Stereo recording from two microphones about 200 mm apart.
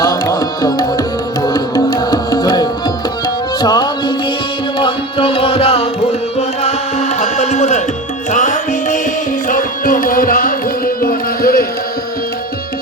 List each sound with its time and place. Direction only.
0.0 s music: 20° left (ahead or behind); by 11.6 s 50° left (ahead or behind)